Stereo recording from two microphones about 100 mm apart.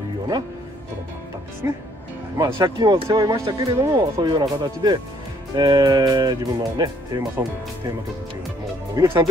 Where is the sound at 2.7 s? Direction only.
55° right (ahead or behind).